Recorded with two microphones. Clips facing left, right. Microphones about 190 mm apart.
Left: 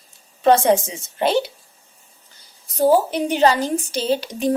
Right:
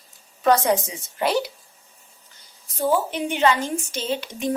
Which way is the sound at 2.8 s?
40° left (ahead or behind).